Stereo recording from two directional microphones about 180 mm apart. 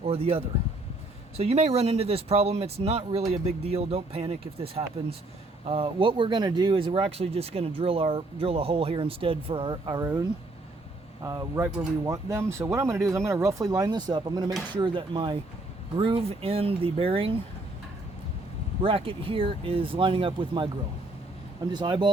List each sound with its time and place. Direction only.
0.0 s speech: 35° right (ahead or behind)
11.2 s speech: 20° right (ahead or behind)
18.8 s speech: 30° right (ahead or behind)
21.7 s speech: 25° right (ahead or behind)